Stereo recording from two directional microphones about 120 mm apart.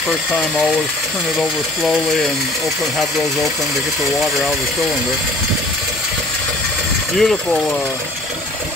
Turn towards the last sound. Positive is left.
turn(degrees=5)  # may be behind; listen again after turning